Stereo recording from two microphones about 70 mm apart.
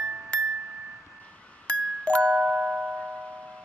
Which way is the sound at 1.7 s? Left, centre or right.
Centre.